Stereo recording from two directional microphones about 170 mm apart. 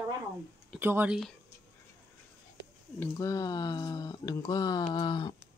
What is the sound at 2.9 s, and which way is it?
Speech, 20° left (ahead or behind).